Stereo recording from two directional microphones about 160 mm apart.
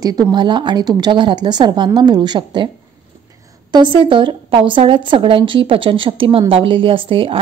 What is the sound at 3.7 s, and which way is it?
A woman's voice, 30° right (ahead or behind).